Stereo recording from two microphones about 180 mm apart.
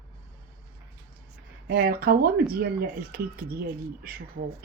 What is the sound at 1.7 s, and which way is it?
Speech, 55° right (ahead or behind).